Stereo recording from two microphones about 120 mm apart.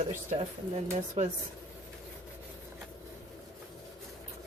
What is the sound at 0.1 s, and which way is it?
Speech, 90° right.